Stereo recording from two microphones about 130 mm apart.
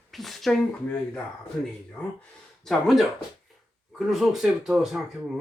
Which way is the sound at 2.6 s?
Centre (ahead or behind).